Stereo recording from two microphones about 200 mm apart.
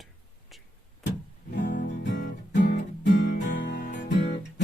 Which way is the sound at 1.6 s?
60° left (ahead or behind).